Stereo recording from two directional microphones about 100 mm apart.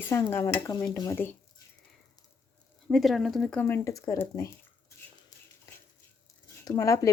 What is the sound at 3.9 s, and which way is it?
Speech, 35° left (ahead or behind).